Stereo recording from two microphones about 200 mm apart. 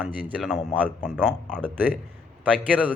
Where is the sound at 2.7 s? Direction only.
5° left (ahead or behind).